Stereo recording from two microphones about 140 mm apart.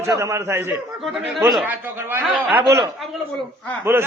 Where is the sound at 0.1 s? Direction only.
20° right (ahead or behind).